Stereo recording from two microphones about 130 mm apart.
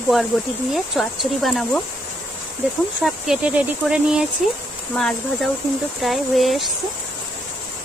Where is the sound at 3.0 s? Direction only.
5° right (ahead or behind).